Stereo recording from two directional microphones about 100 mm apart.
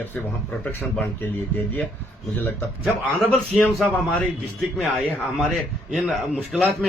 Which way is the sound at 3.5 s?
Centre (ahead or behind).